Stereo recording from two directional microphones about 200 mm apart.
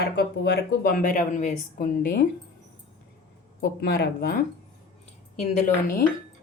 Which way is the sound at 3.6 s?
50° left (ahead or behind).